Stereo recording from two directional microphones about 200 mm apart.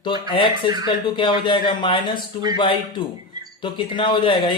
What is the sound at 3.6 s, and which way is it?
Speech, 25° left (ahead or behind).